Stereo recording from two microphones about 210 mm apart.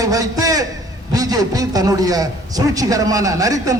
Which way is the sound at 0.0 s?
15° right (ahead or behind).